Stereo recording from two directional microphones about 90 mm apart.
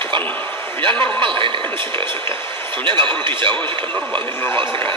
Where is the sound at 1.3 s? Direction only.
70° right (ahead or behind).